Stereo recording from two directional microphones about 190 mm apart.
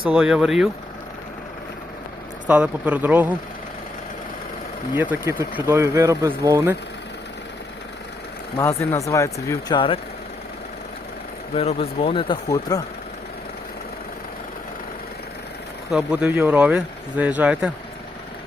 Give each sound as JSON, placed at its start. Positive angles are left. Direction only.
{"t": 0.1, "sound": "speech", "side_deg": -5}
{"t": 2.5, "sound": "speech", "side_deg": -10}
{"t": 4.9, "sound": "speech", "side_deg": -10}
{"t": 8.5, "sound": "speech", "side_deg": 15}
{"t": 11.5, "sound": "speech", "side_deg": 35}
{"t": 15.9, "sound": "speech", "side_deg": -5}